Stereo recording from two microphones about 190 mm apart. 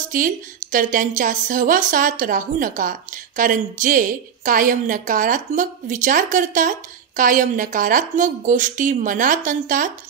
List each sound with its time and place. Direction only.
0.1 s a woman's voice: 45° right (ahead or behind)